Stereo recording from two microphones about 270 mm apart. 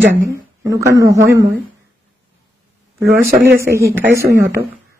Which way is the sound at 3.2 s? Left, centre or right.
Centre.